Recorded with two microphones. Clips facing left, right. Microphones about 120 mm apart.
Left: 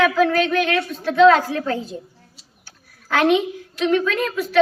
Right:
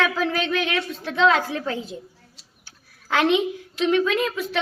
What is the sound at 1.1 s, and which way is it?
Speech, 45° left (ahead or behind).